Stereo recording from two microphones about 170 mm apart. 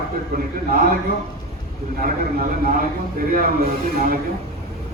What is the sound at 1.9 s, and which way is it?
A man's voice, 55° right (ahead or behind).